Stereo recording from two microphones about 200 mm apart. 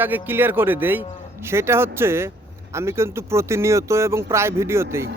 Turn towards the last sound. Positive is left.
turn(degrees=-15)  # may be behind; listen again after turning